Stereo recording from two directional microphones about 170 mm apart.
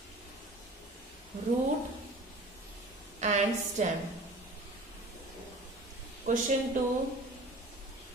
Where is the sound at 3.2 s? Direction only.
45° right (ahead or behind).